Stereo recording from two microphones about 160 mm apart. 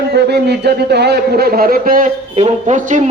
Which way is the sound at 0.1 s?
90° right.